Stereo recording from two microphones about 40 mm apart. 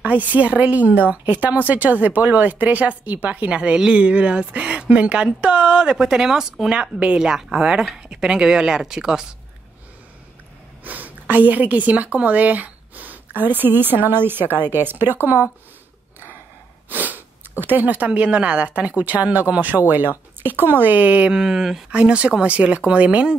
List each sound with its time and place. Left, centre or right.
0.0 s speech: right
3.4 s speech: right
6.7 s speech: right
7.2 s a woman's voice: centre
10.8 s a woman's voice: right
13.4 s a woman's voice: right
15.2 s speech: right
16.9 s snort: right
18.3 s a woman's voice: right
21.0 s speech: right
21.3 s a woman's voice: centre
21.9 s speech: right